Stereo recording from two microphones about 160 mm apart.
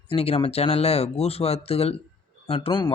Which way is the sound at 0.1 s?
35° left (ahead or behind).